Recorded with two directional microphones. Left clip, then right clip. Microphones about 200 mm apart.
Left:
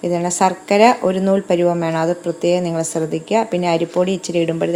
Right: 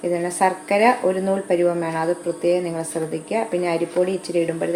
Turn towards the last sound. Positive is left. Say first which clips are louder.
# left 3 dB
turn(degrees=45)  # may be behind; listen again after turning